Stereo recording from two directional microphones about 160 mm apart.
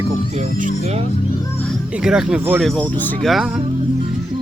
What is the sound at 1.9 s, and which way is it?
Speech, 5° right (ahead or behind).